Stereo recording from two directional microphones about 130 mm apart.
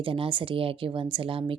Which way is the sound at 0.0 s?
45° right (ahead or behind).